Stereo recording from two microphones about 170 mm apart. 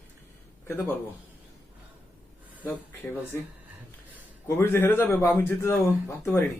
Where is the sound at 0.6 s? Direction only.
10° left (ahead or behind).